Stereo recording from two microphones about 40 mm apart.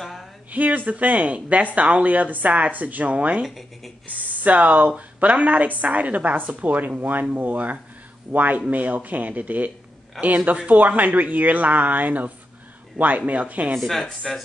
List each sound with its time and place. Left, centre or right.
0.0 s a sound: centre
0.5 s a woman's voice: right
3.4 s speech: centre
4.4 s a woman's voice: right
13.0 s speech: centre
13.3 s a woman's voice: right
13.7 s speech: centre